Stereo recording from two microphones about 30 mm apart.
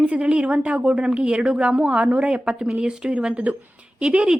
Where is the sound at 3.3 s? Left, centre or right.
Right.